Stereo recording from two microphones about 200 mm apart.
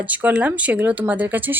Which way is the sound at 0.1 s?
10° right (ahead or behind).